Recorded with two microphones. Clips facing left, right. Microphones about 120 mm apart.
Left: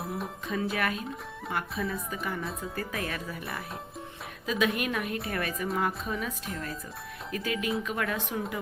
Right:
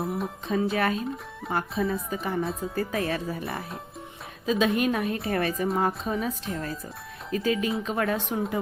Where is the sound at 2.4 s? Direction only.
Centre (ahead or behind).